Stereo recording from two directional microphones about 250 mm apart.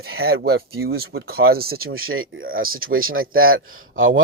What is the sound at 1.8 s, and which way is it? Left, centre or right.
Speech, right.